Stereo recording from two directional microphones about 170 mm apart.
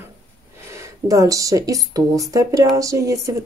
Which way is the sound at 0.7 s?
15° right (ahead or behind).